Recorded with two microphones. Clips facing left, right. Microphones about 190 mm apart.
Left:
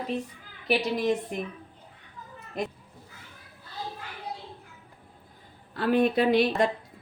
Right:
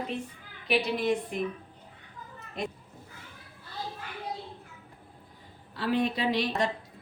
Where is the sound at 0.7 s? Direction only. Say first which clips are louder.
Left 2 dB; 40° left (ahead or behind).